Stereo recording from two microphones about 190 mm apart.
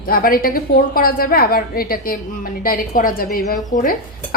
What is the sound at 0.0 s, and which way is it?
A woman's voice, 50° left (ahead or behind).